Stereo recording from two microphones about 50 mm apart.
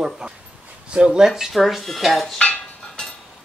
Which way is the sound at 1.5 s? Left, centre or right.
Centre.